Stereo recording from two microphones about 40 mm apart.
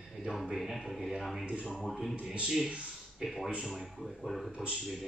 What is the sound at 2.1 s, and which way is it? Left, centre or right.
Speech, right.